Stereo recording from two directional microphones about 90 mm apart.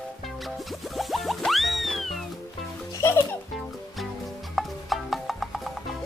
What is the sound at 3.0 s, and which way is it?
Music, 30° left (ahead or behind).